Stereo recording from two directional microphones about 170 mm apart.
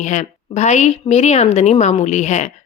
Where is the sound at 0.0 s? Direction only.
45° left (ahead or behind).